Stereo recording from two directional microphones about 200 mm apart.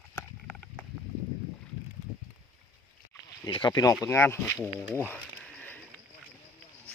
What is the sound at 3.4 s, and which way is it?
Speech, 20° left (ahead or behind).